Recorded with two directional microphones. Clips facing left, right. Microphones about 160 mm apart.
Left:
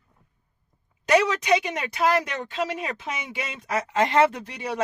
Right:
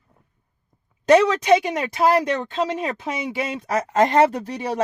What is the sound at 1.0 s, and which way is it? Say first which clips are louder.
Speech: right 6 dB; 30° right (ahead or behind).